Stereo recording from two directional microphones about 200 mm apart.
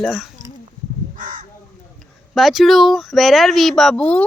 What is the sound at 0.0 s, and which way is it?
Speech, centre (ahead or behind).